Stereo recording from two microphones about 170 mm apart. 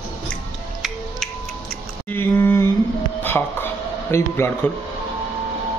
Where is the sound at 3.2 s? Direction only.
10° left (ahead or behind).